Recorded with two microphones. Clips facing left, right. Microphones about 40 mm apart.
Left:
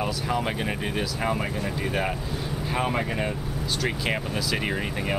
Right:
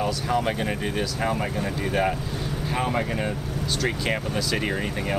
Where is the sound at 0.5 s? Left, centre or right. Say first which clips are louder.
Right 2 dB; centre.